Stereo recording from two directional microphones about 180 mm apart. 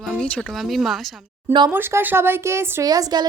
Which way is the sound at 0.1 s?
5° left (ahead or behind).